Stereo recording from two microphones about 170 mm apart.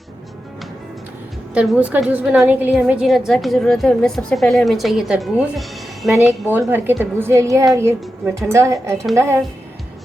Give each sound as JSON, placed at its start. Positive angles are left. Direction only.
{"t": 1.5, "sound": "a woman's voice", "side_deg": -5}
{"t": 6.5, "sound": "a woman's voice", "side_deg": -10}
{"t": 8.0, "sound": "a woman's voice", "side_deg": 0}
{"t": 8.5, "sound": "a woman's voice", "side_deg": -15}